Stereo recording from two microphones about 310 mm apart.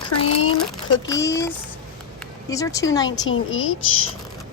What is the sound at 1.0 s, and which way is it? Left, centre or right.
A woman's voice, centre.